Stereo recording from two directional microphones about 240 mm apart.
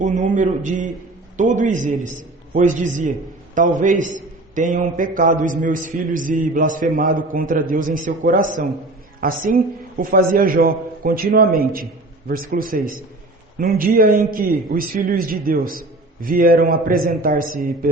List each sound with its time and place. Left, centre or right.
0.0 s a man's voice: right